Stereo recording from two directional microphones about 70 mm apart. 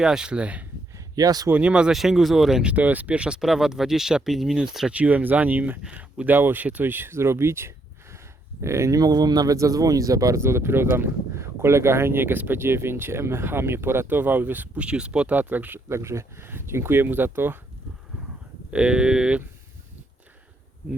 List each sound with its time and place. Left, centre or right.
0.0 s speech: centre
0.9 s a sound: right
1.5 s speech: centre
2.0 s speech: centre
2.7 s speech: right; by 4.9 s centre
4.9 s speech: right
9.0 s speech: right
10.4 s speech: right
14.8 s speech: centre
16.0 s speech: right
18.7 s speech: centre